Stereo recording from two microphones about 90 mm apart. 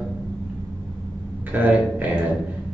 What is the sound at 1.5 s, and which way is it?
Speech, 15° right (ahead or behind).